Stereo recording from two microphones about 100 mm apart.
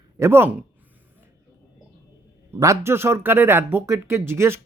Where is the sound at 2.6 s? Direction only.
30° right (ahead or behind).